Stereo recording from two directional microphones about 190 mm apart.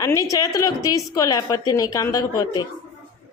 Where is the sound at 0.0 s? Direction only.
15° left (ahead or behind).